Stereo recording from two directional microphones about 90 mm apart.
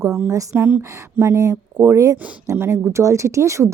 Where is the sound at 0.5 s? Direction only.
25° right (ahead or behind).